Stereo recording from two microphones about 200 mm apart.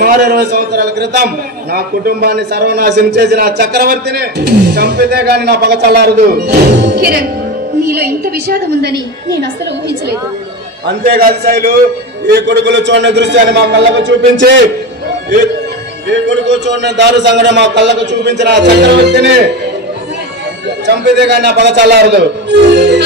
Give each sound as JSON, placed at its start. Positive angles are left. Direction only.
{"t": 0.0, "sound": "a man's voice", "side_deg": -50}
{"t": 16.1, "sound": "a man's voice", "side_deg": -60}
{"t": 20.8, "sound": "a man's voice", "side_deg": -55}